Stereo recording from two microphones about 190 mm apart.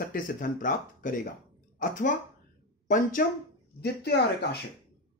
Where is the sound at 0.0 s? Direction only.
50° left (ahead or behind).